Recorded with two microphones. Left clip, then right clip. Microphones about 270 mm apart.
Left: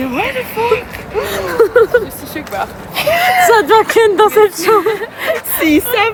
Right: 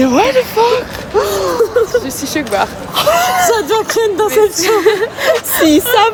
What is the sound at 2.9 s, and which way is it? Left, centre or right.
Speech, centre.